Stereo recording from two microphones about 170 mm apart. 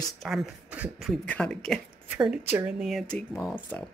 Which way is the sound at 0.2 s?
Centre (ahead or behind).